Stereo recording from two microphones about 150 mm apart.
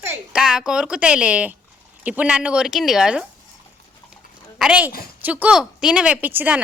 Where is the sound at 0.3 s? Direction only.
5° right (ahead or behind).